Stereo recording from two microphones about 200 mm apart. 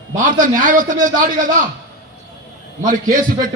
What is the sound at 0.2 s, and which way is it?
A man's voice, 40° right (ahead or behind).